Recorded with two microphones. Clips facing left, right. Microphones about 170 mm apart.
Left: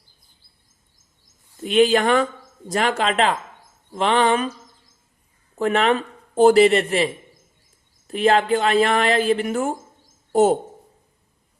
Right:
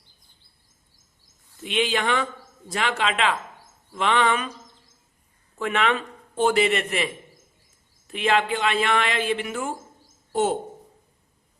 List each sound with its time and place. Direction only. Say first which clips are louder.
1.6 s speech: left 8 dB; 40° left (ahead or behind)
5.5 s speech: left 5 dB; 35° left (ahead or behind)